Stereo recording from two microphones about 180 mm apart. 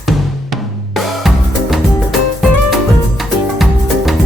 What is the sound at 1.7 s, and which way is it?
Music, centre (ahead or behind).